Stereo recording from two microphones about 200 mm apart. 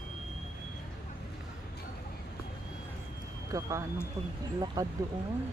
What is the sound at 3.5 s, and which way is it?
Speech, 15° right (ahead or behind).